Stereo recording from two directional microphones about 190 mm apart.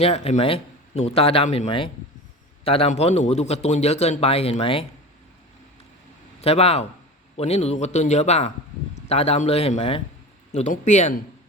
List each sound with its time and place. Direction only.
0.0 s a man's voice: 35° left (ahead or behind)
6.4 s a man's voice: 35° left (ahead or behind)